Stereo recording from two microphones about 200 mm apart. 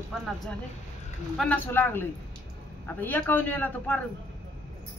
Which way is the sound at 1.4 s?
10° left (ahead or behind).